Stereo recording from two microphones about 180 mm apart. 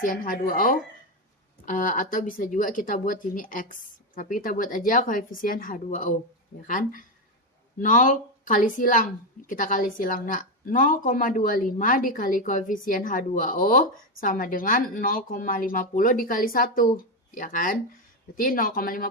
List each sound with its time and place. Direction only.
0.0 s a woman's voice: 50° left (ahead or behind)